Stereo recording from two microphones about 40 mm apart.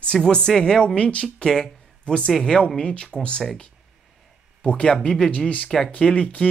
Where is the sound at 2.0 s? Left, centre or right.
Left.